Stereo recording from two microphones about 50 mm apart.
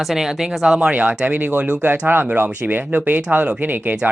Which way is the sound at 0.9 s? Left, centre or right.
Right.